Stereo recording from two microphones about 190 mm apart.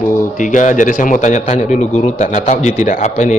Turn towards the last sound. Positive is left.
turn(degrees=40)  # may be behind; listen again after turning